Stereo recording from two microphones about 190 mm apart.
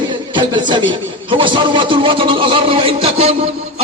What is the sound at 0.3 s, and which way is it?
A man's voice, 25° right (ahead or behind).